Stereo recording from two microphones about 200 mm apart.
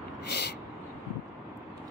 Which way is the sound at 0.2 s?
55° left (ahead or behind).